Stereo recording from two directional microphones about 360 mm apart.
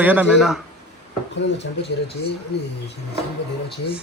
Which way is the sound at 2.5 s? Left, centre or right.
Left.